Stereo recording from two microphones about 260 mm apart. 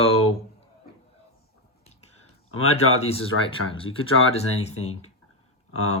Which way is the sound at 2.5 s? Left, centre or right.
Left.